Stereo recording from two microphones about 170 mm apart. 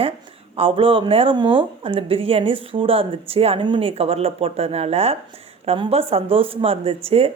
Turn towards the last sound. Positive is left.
turn(degrees=-35)  # may be behind; listen again after turning